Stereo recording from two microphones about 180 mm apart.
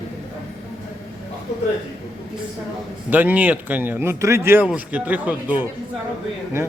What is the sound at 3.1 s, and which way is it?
Speech, 10° right (ahead or behind).